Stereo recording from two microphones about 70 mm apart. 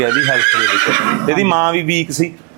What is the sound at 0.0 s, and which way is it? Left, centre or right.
Speech, right.